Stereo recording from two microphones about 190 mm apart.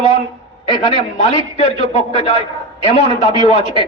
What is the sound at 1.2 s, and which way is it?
A man's voice, 35° left (ahead or behind).